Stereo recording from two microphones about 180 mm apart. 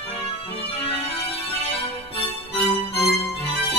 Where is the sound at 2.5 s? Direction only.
35° left (ahead or behind).